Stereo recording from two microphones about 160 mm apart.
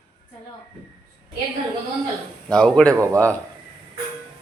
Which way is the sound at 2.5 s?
5° left (ahead or behind).